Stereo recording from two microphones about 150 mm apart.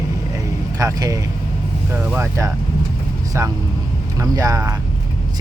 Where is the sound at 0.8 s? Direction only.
25° right (ahead or behind).